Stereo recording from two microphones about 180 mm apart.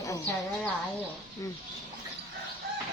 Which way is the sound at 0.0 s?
20° left (ahead or behind).